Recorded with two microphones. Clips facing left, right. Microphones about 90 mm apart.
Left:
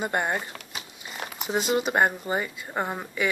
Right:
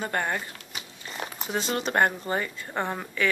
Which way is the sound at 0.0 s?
15° left (ahead or behind).